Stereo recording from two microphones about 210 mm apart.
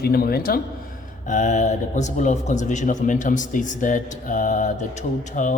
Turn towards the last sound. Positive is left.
turn(degrees=35)  # may be behind; listen again after turning